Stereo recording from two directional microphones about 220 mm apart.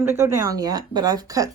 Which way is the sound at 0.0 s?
10° right (ahead or behind).